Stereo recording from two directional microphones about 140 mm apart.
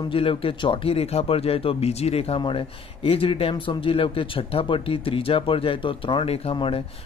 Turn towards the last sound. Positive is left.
turn(degrees=40)  # may be behind; listen again after turning